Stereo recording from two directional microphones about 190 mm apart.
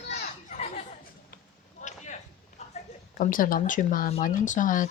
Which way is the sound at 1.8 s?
40° left (ahead or behind).